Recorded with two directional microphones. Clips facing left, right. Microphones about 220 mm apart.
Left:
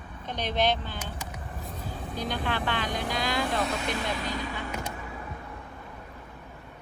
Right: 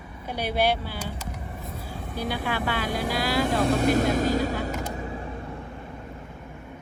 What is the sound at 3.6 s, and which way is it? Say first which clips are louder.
Speech: right 9 dB; 45° right (ahead or behind).